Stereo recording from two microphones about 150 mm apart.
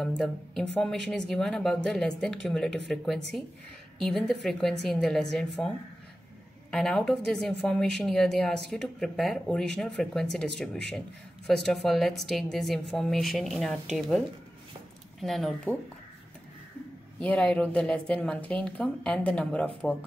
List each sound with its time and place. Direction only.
0.2 s speech: 5° left (ahead or behind)
6.7 s speech: 5° left (ahead or behind)
17.2 s a woman's voice: 5° left (ahead or behind)